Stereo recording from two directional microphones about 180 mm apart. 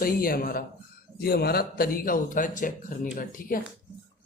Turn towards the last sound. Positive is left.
turn(degrees=50)  # may be behind; listen again after turning